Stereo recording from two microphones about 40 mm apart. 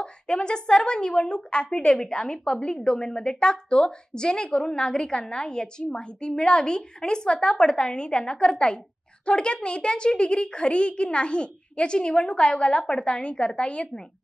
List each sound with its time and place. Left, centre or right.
0.0 s a woman's voice: left